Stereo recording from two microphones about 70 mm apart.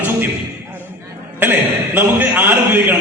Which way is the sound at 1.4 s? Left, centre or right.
Right.